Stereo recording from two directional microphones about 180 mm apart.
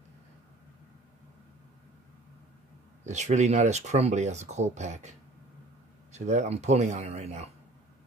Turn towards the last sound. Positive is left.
turn(degrees=-35)  # may be behind; listen again after turning